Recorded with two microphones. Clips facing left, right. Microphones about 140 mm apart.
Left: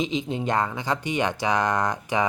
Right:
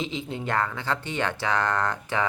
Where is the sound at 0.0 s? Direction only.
20° left (ahead or behind).